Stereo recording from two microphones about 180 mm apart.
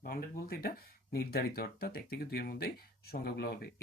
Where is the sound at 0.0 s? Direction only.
55° left (ahead or behind).